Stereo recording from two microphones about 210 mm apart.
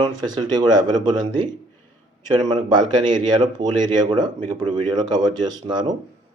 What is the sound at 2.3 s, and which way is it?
A man's voice, 30° right (ahead or behind).